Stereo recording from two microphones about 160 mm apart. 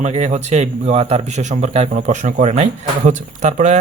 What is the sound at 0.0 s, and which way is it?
A man's voice, 45° right (ahead or behind).